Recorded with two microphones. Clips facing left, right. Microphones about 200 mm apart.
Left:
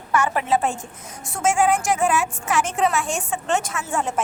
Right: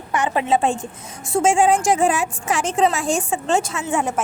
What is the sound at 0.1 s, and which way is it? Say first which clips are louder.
A woman's voice: right 1 dB; 20° right (ahead or behind).